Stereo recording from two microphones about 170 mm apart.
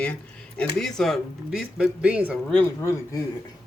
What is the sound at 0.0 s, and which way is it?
Speech, 5° left (ahead or behind).